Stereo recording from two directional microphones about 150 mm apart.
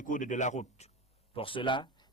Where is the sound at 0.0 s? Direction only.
60° left (ahead or behind).